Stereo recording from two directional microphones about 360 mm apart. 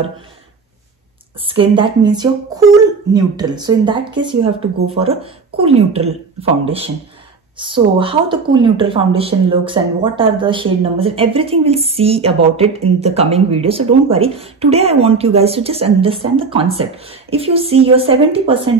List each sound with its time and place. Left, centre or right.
1.4 s speech: centre